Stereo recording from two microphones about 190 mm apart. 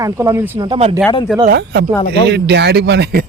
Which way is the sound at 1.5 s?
60° right (ahead or behind).